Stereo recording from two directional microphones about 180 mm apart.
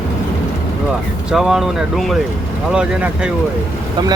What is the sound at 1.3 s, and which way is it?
Speech, centre (ahead or behind).